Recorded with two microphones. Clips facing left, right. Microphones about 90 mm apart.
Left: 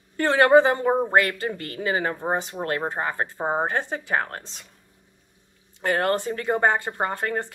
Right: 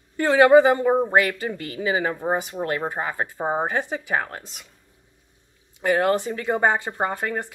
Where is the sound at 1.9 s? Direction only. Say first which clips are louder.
Right 2 dB; 10° right (ahead or behind).